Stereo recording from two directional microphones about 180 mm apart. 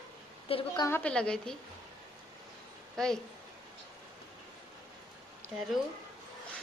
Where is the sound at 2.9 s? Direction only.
5° left (ahead or behind).